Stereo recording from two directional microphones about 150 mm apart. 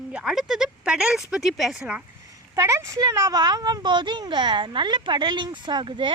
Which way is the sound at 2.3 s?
20° right (ahead or behind).